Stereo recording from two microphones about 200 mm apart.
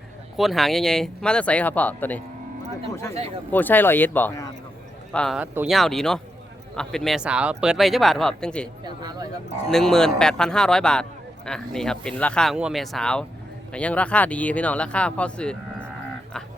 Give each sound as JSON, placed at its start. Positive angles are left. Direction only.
{"t": 0.3, "sound": "speech", "side_deg": 0}
{"t": 3.5, "sound": "speech", "side_deg": 10}
{"t": 8.8, "sound": "a sound", "side_deg": -20}
{"t": 9.6, "sound": "speech", "side_deg": 0}